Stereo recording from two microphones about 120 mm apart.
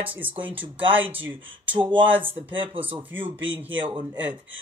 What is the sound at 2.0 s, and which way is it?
Speech, 15° right (ahead or behind).